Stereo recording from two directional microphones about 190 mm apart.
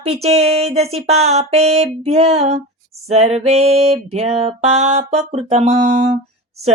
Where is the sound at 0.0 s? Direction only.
35° right (ahead or behind).